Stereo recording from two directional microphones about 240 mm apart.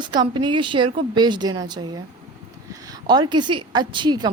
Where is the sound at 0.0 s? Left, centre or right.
Centre.